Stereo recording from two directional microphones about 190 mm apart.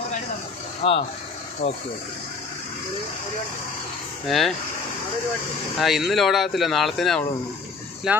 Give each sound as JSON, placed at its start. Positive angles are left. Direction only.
{"t": 0.8, "sound": "speech", "side_deg": 30}
{"t": 4.3, "sound": "speech", "side_deg": 0}
{"t": 5.8, "sound": "speech", "side_deg": 0}